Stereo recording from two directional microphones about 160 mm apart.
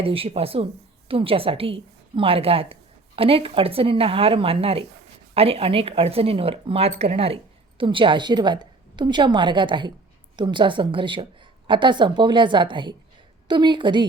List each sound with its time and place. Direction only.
0.0 s a woman's voice: 35° right (ahead or behind)